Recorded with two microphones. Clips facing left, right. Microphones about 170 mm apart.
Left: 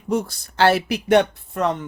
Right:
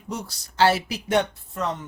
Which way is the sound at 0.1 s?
55° left (ahead or behind).